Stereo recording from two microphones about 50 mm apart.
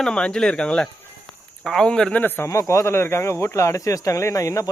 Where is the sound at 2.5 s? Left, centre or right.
Left.